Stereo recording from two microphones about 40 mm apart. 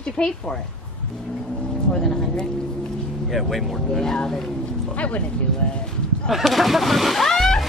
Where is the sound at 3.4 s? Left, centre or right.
Centre.